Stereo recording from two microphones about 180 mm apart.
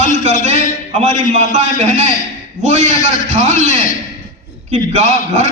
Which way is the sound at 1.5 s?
40° right (ahead or behind).